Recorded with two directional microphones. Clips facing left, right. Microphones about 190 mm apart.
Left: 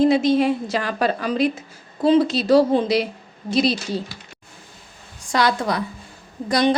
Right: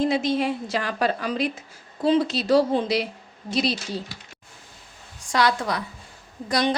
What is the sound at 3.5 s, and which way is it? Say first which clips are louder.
Speech: left 5 dB; 35° left (ahead or behind).